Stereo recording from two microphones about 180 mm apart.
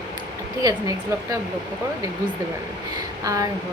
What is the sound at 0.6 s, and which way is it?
Speech, 20° right (ahead or behind).